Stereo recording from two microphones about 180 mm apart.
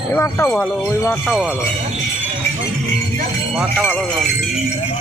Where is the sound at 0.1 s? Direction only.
15° left (ahead or behind).